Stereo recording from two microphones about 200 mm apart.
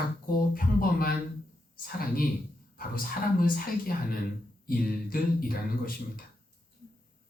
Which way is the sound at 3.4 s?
45° left (ahead or behind).